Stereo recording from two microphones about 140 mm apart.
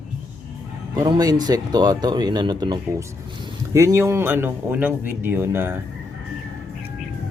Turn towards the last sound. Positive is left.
turn(degrees=-15)  # may be behind; listen again after turning